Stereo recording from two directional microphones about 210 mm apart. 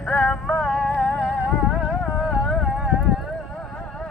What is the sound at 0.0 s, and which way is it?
Music, 5° left (ahead or behind).